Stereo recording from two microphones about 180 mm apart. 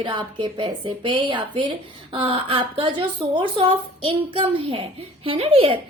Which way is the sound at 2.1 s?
30° right (ahead or behind).